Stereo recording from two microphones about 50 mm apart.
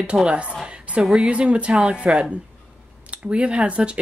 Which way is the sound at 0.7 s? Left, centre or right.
Right.